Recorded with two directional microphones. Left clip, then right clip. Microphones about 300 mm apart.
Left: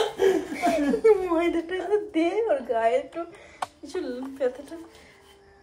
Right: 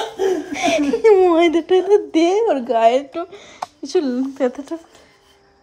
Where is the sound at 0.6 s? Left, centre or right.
Right.